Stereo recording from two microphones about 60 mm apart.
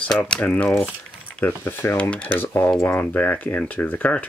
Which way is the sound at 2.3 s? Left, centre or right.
Left.